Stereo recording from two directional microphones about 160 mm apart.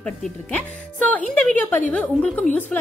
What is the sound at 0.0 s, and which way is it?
A woman's voice, 5° left (ahead or behind).